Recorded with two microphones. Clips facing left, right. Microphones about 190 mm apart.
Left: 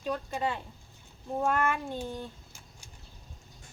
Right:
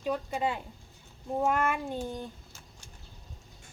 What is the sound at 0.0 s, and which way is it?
Speech, 10° right (ahead or behind).